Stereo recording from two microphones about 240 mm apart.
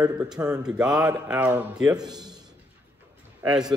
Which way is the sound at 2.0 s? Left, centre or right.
Centre.